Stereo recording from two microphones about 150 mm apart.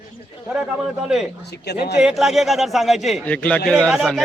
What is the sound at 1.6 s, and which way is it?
Speech, 90° left.